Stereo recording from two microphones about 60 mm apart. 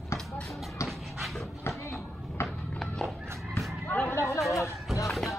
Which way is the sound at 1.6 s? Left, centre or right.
Left.